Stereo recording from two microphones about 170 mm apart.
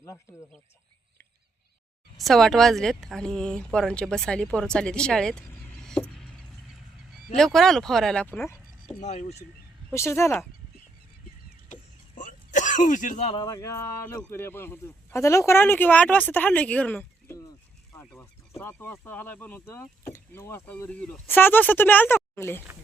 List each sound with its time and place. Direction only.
2.1 s speech: centre (ahead or behind)
9.0 s speech: 45° left (ahead or behind)
9.9 s speech: 15° left (ahead or behind)
11.7 s throat clearing: 50° left (ahead or behind)
13.3 s speech: 20° left (ahead or behind)